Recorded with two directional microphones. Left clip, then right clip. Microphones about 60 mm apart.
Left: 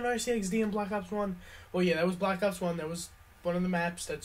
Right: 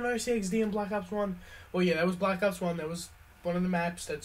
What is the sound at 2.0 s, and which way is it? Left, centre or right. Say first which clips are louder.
Speech: right 1 dB; right.